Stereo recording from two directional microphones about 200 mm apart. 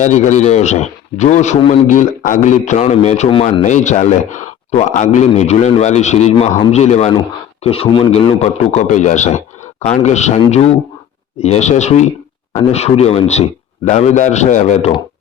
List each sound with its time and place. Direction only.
0.0 s a man's voice: 35° left (ahead or behind)
3.6 s a man's voice: 40° left (ahead or behind)